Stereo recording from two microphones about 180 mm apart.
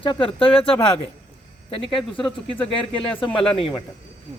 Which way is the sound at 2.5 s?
30° left (ahead or behind).